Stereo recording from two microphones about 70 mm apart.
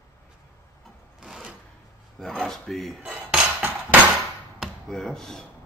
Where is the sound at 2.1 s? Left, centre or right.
Centre.